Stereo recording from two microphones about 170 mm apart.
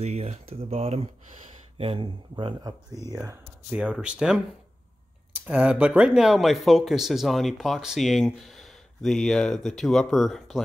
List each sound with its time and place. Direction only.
0.0 s speech: 40° right (ahead or behind)
3.7 s speech: 5° right (ahead or behind)